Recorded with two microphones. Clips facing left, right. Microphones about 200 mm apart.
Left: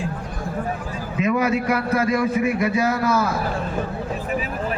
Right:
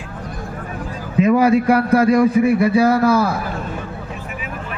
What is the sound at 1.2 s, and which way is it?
A man's voice, 35° right (ahead or behind).